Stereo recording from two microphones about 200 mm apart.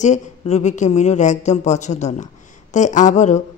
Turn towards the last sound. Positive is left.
turn(degrees=35)  # may be behind; listen again after turning